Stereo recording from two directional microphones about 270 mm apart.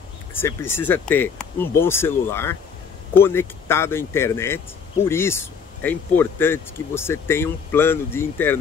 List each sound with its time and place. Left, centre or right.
0.3 s speech: centre